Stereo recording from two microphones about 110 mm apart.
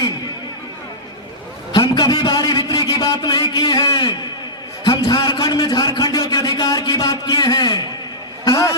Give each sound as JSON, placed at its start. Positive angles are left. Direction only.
{"t": 1.7, "sound": "a man's voice", "side_deg": 40}